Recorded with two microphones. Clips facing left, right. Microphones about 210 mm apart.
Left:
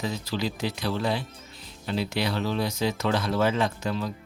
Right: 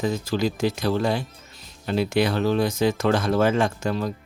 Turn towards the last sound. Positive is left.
turn(degrees=-45)  # may be behind; listen again after turning